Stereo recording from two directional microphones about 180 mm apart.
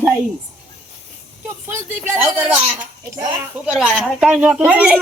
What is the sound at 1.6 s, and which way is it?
A man's voice, 15° right (ahead or behind).